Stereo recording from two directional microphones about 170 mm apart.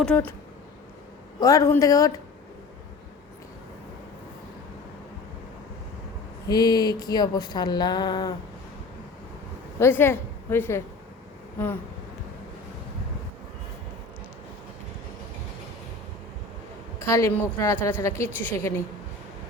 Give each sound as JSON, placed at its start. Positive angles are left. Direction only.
{"t": 0.0, "sound": "a woman's voice", "side_deg": 10}
{"t": 1.4, "sound": "speech", "side_deg": 20}
{"t": 6.5, "sound": "speech", "side_deg": 25}
{"t": 9.7, "sound": "a woman's voice", "side_deg": 15}
{"t": 17.1, "sound": "a woman's voice", "side_deg": 15}